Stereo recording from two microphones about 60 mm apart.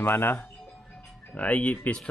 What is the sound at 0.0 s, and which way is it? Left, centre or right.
Speech, left.